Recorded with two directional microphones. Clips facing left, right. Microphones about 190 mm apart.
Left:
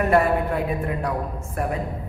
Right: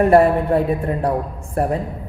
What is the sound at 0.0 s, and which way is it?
A woman's voice, 30° right (ahead or behind).